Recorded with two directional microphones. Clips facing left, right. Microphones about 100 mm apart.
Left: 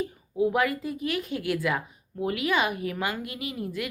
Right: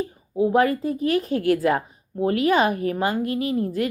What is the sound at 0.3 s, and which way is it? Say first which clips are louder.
Speech: right 5 dB; 30° right (ahead or behind).